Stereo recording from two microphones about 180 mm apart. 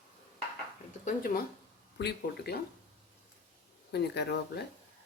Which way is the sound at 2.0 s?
65° left (ahead or behind).